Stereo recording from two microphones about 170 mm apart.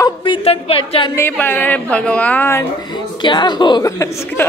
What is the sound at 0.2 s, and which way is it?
Speech, 30° left (ahead or behind).